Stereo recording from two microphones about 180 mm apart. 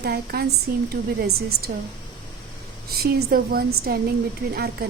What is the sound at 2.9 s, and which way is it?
A woman's voice, 55° right (ahead or behind).